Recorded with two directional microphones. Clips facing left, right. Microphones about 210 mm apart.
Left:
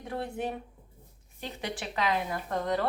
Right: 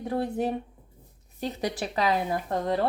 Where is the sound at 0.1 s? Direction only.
35° right (ahead or behind).